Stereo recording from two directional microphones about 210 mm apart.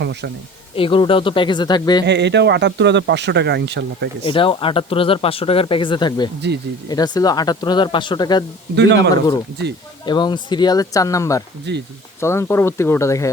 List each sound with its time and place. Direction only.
0.0 s speech: 55° right (ahead or behind)
0.8 s speech: 25° left (ahead or behind)
2.0 s speech: 55° right (ahead or behind)
4.2 s speech: 25° left (ahead or behind)
8.7 s speech: 55° right (ahead or behind)
10.1 s speech: 20° left (ahead or behind)
11.7 s speech: 55° right (ahead or behind)
12.2 s speech: 10° left (ahead or behind)